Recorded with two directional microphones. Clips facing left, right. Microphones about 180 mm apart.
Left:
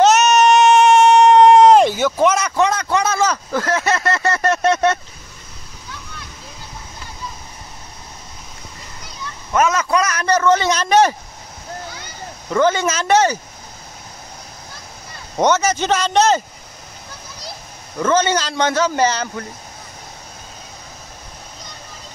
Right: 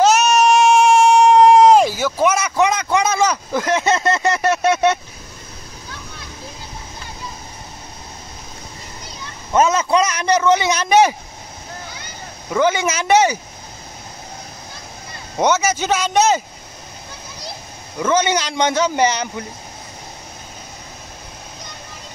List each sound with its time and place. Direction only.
0.0 s a sound: centre (ahead or behind)
9.5 s a man's voice: 25° right (ahead or behind); by 11.1 s 10° right (ahead or behind)
12.4 s speech: 10° right (ahead or behind)
15.3 s speech: 5° right (ahead or behind)
17.9 s speech: 10° right (ahead or behind)